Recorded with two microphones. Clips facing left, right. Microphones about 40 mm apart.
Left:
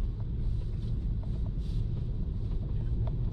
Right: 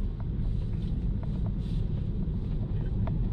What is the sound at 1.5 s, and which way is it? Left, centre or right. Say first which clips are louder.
Vehicle: right 4 dB; right.